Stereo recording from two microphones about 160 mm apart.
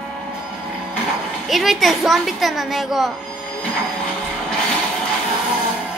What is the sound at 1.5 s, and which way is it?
A woman's voice, centre (ahead or behind).